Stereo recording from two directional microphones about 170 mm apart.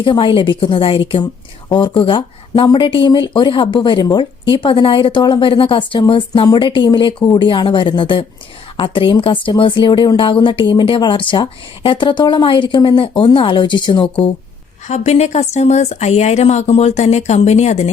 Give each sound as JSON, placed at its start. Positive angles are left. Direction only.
{"t": 0.0, "sound": "speech", "side_deg": 30}
{"t": 14.8, "sound": "speech", "side_deg": 40}